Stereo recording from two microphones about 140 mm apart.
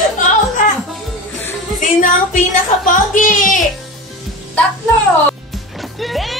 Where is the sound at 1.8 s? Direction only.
70° left (ahead or behind).